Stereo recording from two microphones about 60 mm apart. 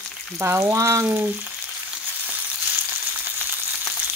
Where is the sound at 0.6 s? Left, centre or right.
Right.